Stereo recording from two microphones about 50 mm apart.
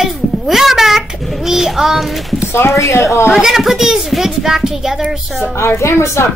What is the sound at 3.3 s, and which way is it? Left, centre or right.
A child's voice, centre.